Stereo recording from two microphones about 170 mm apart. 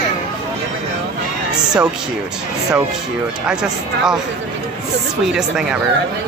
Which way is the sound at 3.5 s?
5° right (ahead or behind).